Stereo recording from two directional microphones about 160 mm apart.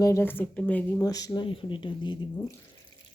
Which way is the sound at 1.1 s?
20° left (ahead or behind).